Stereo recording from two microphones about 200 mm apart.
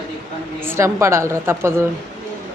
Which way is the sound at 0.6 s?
10° right (ahead or behind).